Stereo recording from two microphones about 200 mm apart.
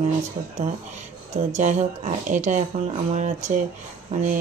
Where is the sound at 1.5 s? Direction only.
35° right (ahead or behind).